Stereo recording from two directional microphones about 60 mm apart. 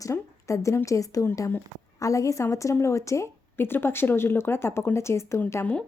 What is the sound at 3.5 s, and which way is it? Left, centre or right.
Speech, left.